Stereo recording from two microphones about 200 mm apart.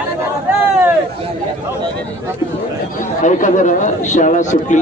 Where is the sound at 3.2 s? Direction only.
40° left (ahead or behind).